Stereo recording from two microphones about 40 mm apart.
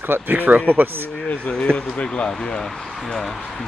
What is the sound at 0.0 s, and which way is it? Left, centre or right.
Speech, right.